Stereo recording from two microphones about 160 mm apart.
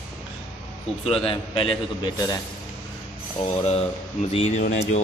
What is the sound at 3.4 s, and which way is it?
Speech, 40° left (ahead or behind).